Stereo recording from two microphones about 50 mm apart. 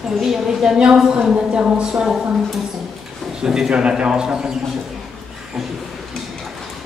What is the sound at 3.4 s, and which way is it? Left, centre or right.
A man's voice, centre.